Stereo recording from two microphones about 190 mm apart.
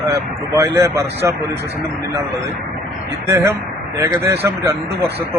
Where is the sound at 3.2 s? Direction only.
15° right (ahead or behind).